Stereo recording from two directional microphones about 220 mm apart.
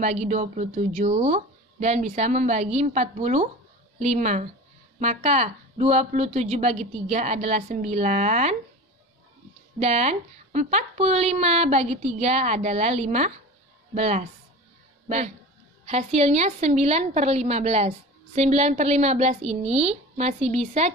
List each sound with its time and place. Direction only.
0.0 s a woman's voice: 30° right (ahead or behind)
9.8 s a woman's voice: 30° right (ahead or behind)